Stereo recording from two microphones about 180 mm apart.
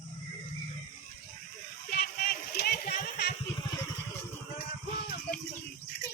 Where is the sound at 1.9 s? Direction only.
55° left (ahead or behind).